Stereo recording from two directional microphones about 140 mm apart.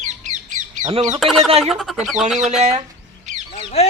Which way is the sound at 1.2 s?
Centre (ahead or behind).